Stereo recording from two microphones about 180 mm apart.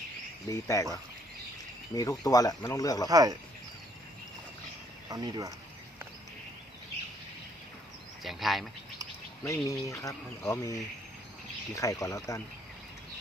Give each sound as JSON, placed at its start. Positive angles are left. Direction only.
{"t": 0.4, "sound": "speech", "side_deg": 20}
{"t": 1.9, "sound": "speech", "side_deg": 20}
{"t": 3.1, "sound": "speech", "side_deg": -20}
{"t": 5.0, "sound": "speech", "side_deg": -20}
{"t": 8.2, "sound": "speech", "side_deg": 0}
{"t": 9.4, "sound": "speech", "side_deg": 15}